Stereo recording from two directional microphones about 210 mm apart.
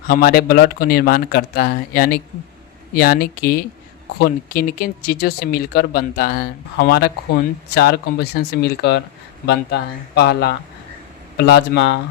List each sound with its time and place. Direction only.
0.1 s speech: 45° left (ahead or behind)